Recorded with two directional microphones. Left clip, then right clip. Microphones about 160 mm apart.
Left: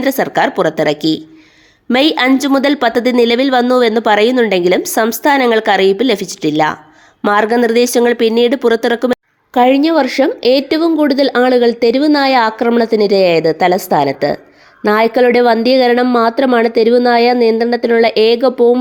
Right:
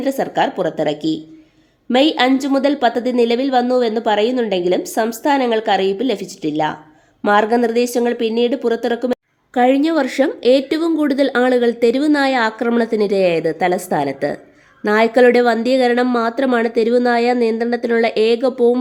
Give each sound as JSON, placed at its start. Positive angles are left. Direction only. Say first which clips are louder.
{"t": 0.0, "sound": "a woman's voice", "louder": "left 4 dB", "side_deg": 35}
{"t": 9.6, "sound": "speech", "louder": "left 4 dB", "side_deg": 20}